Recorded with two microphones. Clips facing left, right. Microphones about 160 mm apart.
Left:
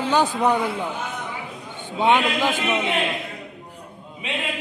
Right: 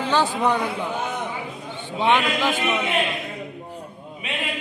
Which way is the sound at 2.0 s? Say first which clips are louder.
Left 1 dB; 15° left (ahead or behind).